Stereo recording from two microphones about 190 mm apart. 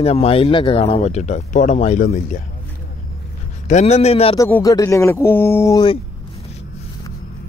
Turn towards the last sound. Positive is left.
turn(degrees=15)  # may be behind; listen again after turning